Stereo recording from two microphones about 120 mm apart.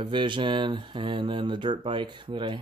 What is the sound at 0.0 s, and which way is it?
Speech, 40° right (ahead or behind).